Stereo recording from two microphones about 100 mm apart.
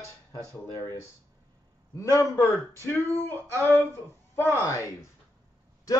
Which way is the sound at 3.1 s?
20° left (ahead or behind).